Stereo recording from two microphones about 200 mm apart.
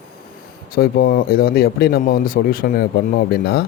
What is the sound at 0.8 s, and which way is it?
Speech, 50° left (ahead or behind).